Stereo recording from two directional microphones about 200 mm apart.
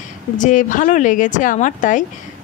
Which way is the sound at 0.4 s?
40° left (ahead or behind).